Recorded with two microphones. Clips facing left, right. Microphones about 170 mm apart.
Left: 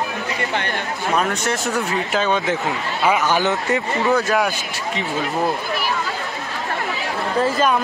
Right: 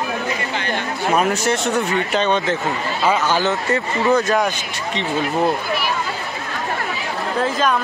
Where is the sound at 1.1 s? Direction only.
Centre (ahead or behind).